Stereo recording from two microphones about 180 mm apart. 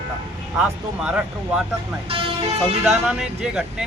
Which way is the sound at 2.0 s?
30° right (ahead or behind).